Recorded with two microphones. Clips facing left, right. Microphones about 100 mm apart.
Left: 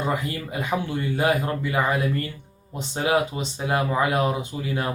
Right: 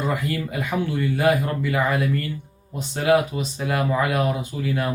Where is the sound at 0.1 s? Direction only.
25° left (ahead or behind).